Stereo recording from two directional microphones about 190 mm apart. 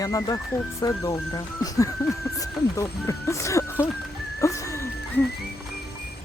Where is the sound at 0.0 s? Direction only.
20° left (ahead or behind).